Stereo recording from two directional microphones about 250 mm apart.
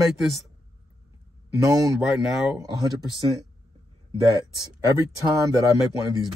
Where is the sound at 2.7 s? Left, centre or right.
Centre.